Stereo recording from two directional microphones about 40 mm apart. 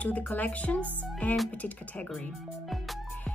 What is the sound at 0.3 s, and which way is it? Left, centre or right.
Speech, left.